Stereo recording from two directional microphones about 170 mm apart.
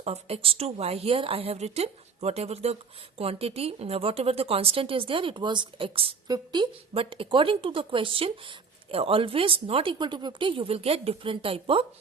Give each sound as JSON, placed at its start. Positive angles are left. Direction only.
{"t": 0.0, "sound": "a woman's voice", "side_deg": -35}